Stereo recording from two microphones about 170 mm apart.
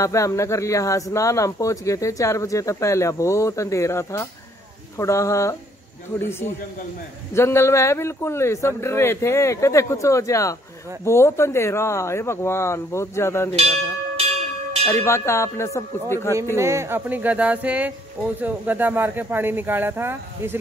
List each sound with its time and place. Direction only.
0.0 s speech: 20° left (ahead or behind)
14.9 s speech: 15° left (ahead or behind)
16.5 s speech: 15° right (ahead or behind)